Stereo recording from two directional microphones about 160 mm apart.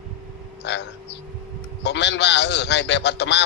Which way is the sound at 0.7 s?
90° left.